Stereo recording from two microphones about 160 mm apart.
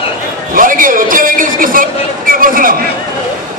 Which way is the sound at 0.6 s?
60° right (ahead or behind).